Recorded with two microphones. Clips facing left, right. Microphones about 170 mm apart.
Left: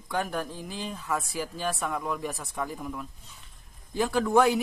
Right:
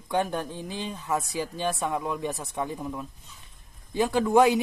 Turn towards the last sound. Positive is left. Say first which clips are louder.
# right 2 dB
turn(degrees=-20)  # may be behind; listen again after turning